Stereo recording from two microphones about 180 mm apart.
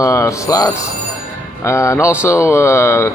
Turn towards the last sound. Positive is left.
turn(degrees=15)  # may be behind; listen again after turning